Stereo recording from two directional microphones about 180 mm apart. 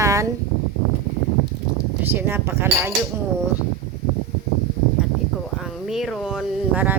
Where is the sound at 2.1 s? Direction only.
10° right (ahead or behind).